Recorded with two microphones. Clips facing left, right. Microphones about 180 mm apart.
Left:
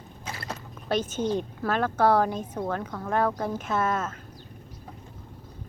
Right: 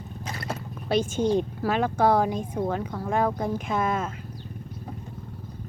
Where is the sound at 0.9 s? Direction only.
10° right (ahead or behind).